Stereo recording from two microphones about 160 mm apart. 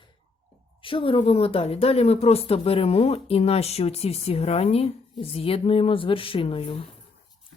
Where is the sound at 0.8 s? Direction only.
35° left (ahead or behind).